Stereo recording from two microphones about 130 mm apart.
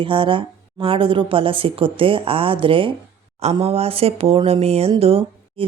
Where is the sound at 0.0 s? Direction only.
40° right (ahead or behind).